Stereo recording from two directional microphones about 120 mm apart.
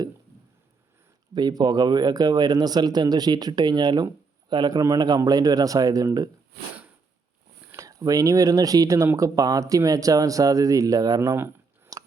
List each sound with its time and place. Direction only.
1.4 s speech: 35° right (ahead or behind)
7.7 s speech: 25° right (ahead or behind)
11.9 s a sound: 30° right (ahead or behind)